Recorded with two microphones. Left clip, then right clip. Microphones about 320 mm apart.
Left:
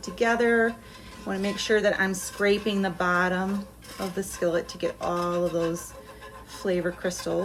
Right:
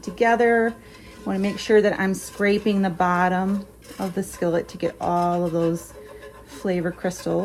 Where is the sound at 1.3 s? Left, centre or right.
Centre.